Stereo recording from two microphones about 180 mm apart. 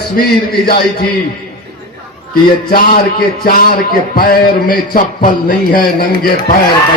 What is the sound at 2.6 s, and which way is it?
A man's voice, 60° left (ahead or behind).